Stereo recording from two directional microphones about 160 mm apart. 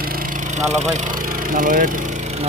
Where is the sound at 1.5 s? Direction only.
60° right (ahead or behind).